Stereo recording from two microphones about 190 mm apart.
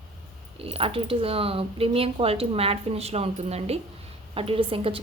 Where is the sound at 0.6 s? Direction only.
30° right (ahead or behind).